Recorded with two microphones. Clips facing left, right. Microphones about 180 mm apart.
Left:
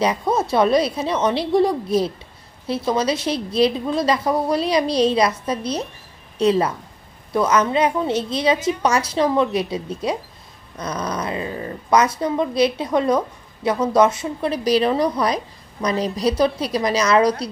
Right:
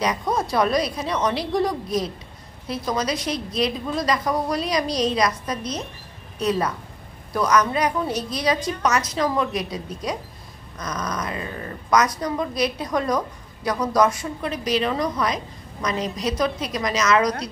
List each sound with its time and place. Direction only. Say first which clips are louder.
0.0 s a woman's voice: left 4 dB; 25° left (ahead or behind)